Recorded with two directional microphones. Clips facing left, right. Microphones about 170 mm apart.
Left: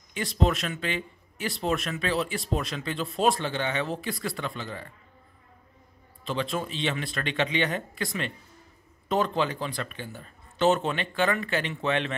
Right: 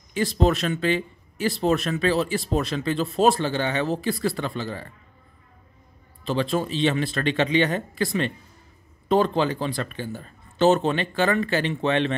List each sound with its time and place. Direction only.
0.1 s speech: 35° right (ahead or behind)
6.2 s speech: 35° right (ahead or behind)